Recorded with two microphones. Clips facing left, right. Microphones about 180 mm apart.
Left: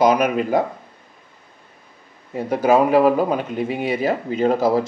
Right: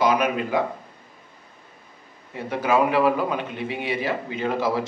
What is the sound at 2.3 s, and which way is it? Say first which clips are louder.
A man's voice: left 6 dB; 45° left (ahead or behind).